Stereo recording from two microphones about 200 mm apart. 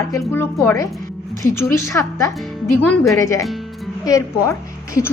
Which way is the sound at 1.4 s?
15° left (ahead or behind).